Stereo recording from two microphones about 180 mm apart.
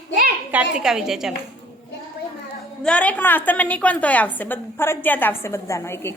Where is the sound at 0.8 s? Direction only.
5° right (ahead or behind).